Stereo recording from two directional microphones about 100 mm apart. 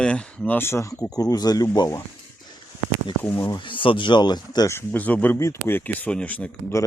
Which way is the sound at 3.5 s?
60° left (ahead or behind).